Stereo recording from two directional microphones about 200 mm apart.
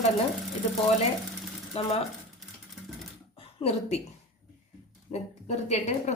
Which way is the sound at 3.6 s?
30° left (ahead or behind).